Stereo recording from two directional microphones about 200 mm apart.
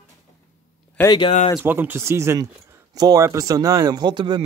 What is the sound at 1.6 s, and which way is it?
Speech, 10° right (ahead or behind).